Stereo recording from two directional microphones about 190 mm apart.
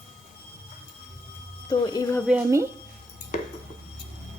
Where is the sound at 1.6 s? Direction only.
20° left (ahead or behind).